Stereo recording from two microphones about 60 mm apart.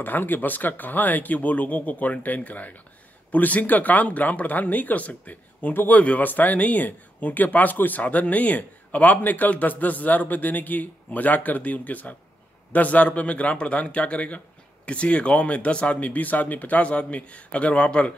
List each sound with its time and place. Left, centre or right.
0.0 s speech: left